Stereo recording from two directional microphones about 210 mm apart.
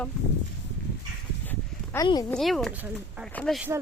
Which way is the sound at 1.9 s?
20° left (ahead or behind).